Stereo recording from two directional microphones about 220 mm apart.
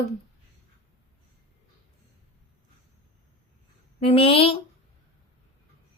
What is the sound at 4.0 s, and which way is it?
Speech, 25° left (ahead or behind).